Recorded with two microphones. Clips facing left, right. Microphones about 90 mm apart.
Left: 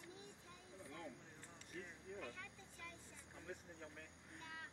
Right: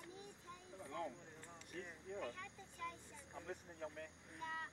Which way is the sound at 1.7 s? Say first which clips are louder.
Right 3 dB; 50° right (ahead or behind).